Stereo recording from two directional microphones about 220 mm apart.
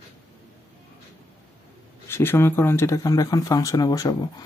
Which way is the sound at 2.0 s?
10° left (ahead or behind).